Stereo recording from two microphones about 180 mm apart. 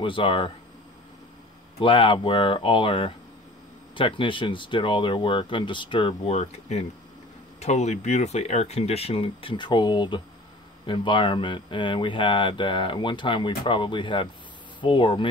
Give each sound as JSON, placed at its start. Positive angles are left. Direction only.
{"t": 0.0, "sound": "speech", "side_deg": 30}
{"t": 1.8, "sound": "speech", "side_deg": 30}